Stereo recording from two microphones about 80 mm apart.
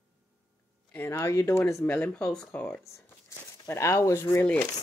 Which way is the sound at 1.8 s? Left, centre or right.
Centre.